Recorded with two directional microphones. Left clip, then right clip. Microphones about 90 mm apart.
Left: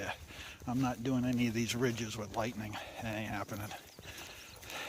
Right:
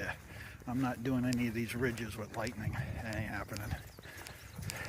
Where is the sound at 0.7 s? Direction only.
20° left (ahead or behind).